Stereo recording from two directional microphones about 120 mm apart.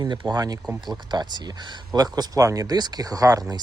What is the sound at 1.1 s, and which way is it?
Speech, 35° right (ahead or behind).